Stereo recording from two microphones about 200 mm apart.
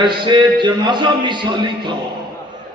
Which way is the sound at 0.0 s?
25° right (ahead or behind).